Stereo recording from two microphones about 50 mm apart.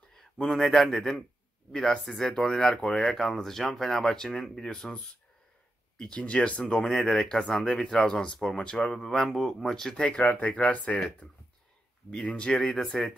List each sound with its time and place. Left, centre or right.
0.1 s speech: centre; by 6.6 s left
6.6 s speech: centre
12.1 s speech: centre